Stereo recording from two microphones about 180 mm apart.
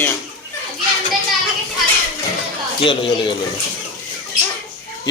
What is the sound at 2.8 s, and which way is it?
Speech, 30° left (ahead or behind).